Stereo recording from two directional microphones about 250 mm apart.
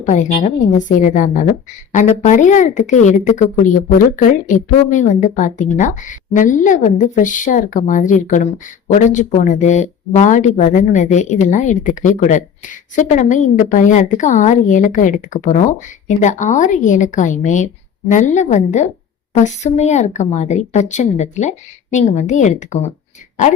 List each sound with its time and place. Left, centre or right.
0.0 s speech: left